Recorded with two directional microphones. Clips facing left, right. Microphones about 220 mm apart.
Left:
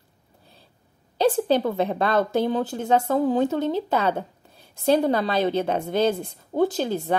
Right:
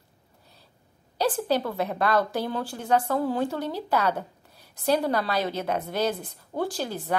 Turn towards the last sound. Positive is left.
turn(degrees=20)  # may be behind; listen again after turning